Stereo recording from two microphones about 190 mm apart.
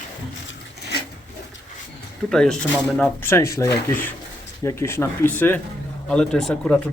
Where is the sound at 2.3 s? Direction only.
5° left (ahead or behind).